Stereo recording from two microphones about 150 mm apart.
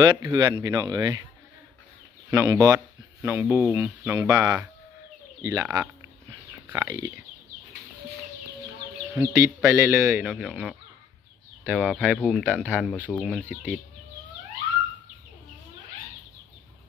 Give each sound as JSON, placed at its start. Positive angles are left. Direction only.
{"t": 0.0, "sound": "speech", "side_deg": -30}
{"t": 2.3, "sound": "speech", "side_deg": -20}
{"t": 4.2, "sound": "speech", "side_deg": -25}
{"t": 6.7, "sound": "speech", "side_deg": -15}
{"t": 9.1, "sound": "speech", "side_deg": -20}
{"t": 10.2, "sound": "speech", "side_deg": 0}